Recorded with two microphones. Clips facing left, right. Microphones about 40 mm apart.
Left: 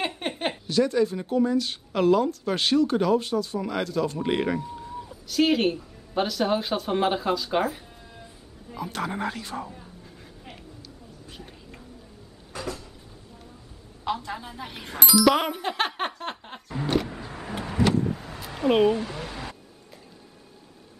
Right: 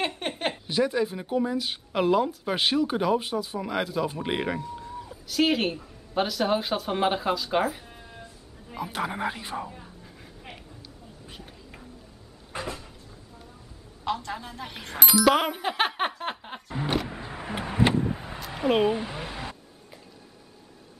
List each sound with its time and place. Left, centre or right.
0.0 s a sound: centre
0.7 s speech: centre
8.6 s speech: centre
9.6 s a sound: centre
12.5 s cupboard open or close: right
14.0 s speech: centre
15.2 s music: centre
16.9 s vehicle: centre
18.5 s speech: centre
18.9 s a sound: centre